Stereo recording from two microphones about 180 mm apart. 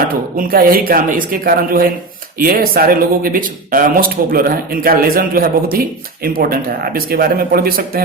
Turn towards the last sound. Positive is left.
turn(degrees=-55)  # may be behind; listen again after turning